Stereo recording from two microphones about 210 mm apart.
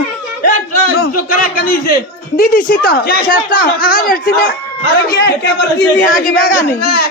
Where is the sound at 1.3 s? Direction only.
40° left (ahead or behind).